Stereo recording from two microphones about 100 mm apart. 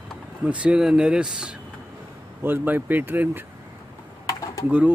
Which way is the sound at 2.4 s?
20° right (ahead or behind).